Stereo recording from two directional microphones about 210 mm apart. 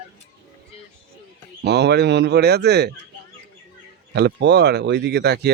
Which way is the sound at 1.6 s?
55° right (ahead or behind).